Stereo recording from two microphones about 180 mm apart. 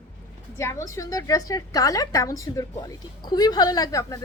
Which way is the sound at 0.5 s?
15° left (ahead or behind).